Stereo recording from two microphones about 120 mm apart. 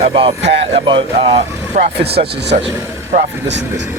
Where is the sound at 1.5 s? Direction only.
20° right (ahead or behind).